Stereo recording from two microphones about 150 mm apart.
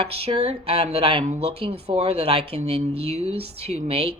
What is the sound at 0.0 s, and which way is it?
A woman's voice, 40° right (ahead or behind).